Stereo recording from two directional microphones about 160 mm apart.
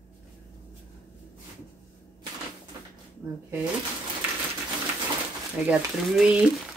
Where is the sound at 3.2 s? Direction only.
20° right (ahead or behind).